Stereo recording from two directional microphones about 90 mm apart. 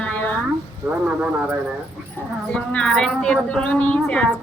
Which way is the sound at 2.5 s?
10° left (ahead or behind).